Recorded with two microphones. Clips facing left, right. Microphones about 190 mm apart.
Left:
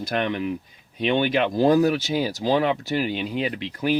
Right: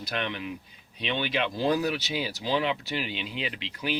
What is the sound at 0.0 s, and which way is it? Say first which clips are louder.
Speech: left 8 dB; 50° left (ahead or behind).